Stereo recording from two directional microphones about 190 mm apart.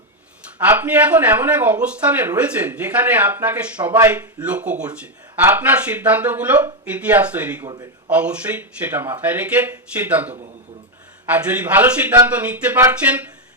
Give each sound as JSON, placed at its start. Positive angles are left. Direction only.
{"t": 0.6, "sound": "speech", "side_deg": -10}
{"t": 7.7, "sound": "a man's voice", "side_deg": -25}
{"t": 8.1, "sound": "speech", "side_deg": -5}